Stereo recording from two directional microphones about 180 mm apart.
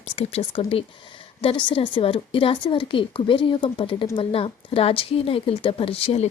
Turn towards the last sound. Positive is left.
turn(degrees=35)  # may be behind; listen again after turning